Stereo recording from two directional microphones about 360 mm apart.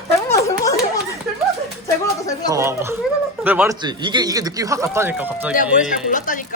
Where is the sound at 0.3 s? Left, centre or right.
Centre.